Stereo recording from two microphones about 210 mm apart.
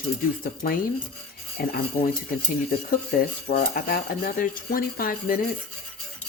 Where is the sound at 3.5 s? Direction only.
40° left (ahead or behind).